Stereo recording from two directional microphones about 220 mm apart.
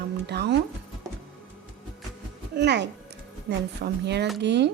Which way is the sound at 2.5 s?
50° right (ahead or behind).